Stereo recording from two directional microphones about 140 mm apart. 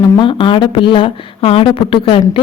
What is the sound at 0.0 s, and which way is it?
A woman's voice, 35° left (ahead or behind).